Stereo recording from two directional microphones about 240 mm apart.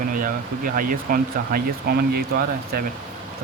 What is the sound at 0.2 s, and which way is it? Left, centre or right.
Speech, right.